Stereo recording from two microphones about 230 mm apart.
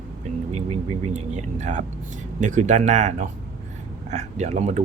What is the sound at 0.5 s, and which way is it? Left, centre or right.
Speech, right.